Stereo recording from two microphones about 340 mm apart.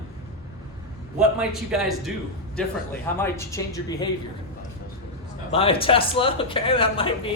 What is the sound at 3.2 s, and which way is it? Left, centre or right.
Speech, centre.